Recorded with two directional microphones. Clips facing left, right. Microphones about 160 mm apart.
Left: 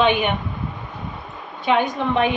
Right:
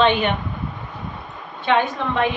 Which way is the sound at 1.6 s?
15° left (ahead or behind).